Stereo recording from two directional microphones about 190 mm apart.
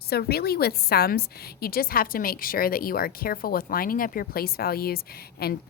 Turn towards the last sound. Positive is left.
turn(degrees=55)  # may be behind; listen again after turning